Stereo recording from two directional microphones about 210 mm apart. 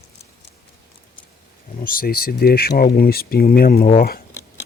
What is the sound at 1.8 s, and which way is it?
Speech, 45° left (ahead or behind).